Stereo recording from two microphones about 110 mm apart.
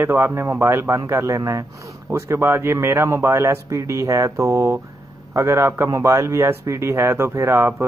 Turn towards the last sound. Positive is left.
turn(degrees=-20)  # may be behind; listen again after turning